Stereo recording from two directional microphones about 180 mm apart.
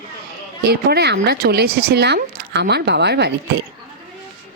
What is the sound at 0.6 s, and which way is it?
Speech, 65° right (ahead or behind).